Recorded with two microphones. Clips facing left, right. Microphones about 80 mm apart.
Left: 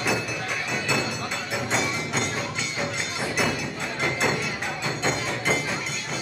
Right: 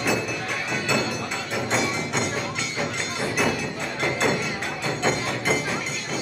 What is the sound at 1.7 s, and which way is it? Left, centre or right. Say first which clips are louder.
Music: right 2 dB; centre.